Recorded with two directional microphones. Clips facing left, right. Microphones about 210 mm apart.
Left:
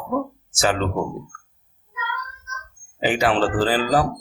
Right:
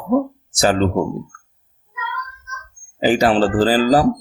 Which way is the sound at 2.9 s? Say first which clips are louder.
Right 5 dB; 35° right (ahead or behind).